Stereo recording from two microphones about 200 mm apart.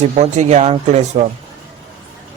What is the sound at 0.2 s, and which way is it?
Speech, 35° right (ahead or behind).